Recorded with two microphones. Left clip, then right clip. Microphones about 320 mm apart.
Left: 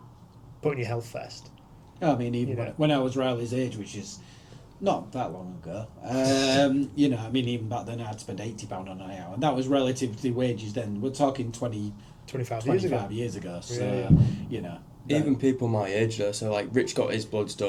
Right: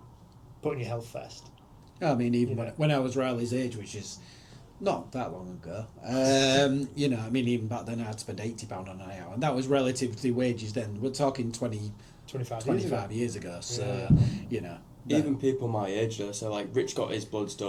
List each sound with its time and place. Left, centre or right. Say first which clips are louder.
0.6 s speech: left 4 dB; left
2.0 s speech: left 1 dB; right
4.8 s speech: left 3 dB; right
10.8 s speech: left 5 dB; right
12.3 s speech: left 4 dB; left
12.9 s speech: left 2 dB; right
15.0 s speech: left 2 dB; left